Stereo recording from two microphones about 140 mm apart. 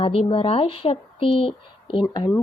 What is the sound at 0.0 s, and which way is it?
Speech, 40° left (ahead or behind).